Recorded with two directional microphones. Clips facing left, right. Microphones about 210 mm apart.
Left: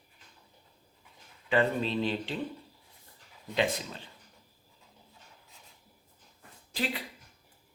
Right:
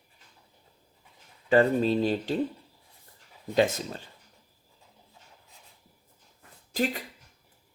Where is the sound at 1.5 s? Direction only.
40° right (ahead or behind).